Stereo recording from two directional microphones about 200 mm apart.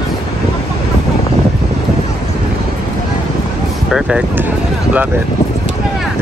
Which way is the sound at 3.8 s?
5° right (ahead or behind).